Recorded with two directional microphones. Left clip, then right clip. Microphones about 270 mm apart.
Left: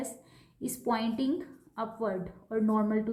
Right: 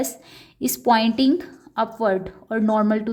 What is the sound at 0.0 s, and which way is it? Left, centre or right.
A woman's voice, right.